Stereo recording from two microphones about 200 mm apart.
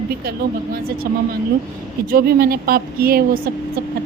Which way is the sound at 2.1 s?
45° right (ahead or behind).